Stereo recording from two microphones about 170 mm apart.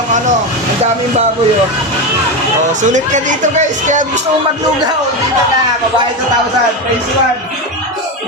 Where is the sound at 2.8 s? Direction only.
45° right (ahead or behind).